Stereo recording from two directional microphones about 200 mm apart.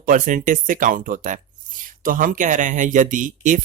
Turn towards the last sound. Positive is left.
turn(degrees=-40)  # may be behind; listen again after turning